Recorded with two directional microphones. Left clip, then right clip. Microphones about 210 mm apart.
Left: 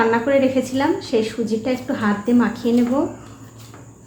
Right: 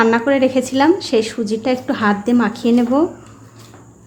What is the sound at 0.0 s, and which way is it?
A woman's voice, 40° right (ahead or behind).